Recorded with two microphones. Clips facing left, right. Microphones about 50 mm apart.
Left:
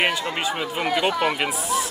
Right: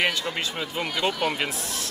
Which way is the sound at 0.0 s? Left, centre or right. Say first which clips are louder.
Left 3 dB; left.